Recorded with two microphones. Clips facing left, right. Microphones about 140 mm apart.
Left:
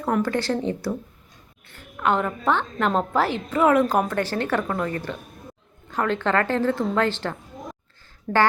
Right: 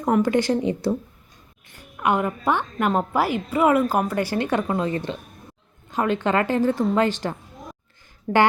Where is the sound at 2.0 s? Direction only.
10° right (ahead or behind).